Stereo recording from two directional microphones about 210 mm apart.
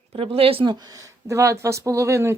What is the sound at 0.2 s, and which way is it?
A woman's voice, 25° right (ahead or behind).